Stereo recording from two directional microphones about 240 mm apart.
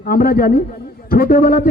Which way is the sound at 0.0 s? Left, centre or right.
Left.